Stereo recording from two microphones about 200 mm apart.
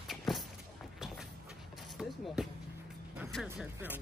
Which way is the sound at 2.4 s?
Centre (ahead or behind).